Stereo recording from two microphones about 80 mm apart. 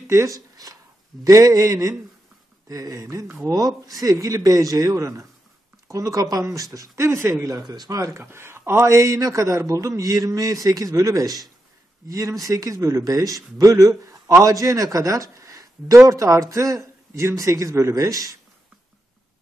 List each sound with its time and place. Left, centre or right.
0.1 s a man's voice: right
7.6 s speech: right
8.2 s a man's voice: right